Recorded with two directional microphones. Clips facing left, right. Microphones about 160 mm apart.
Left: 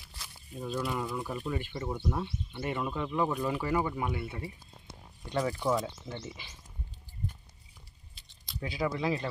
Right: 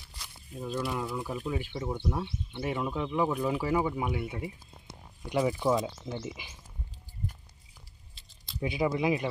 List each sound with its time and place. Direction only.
0.2 s speech: 5° left (ahead or behind); by 6.5 s 15° right (ahead or behind)
8.5 s speech: 20° right (ahead or behind)